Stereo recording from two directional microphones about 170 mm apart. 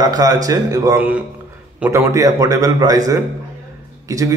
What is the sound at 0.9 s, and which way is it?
Speech, 10° right (ahead or behind).